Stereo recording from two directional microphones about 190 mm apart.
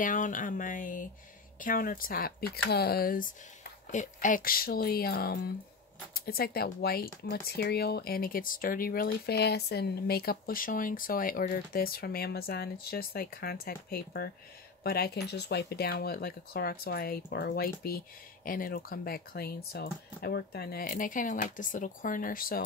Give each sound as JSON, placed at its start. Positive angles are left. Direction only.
{"t": 0.0, "sound": "speech", "side_deg": 45}